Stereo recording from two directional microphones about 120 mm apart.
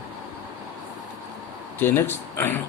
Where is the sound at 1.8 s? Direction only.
20° left (ahead or behind).